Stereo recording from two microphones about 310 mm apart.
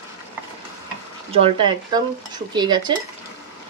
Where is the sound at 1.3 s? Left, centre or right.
Centre.